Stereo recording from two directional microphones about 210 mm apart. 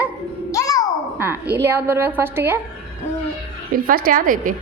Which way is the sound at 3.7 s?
45° right (ahead or behind).